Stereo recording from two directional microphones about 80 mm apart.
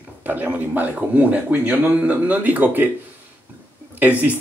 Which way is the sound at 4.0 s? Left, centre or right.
Right.